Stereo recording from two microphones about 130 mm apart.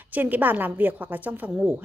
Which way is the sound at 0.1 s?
15° right (ahead or behind).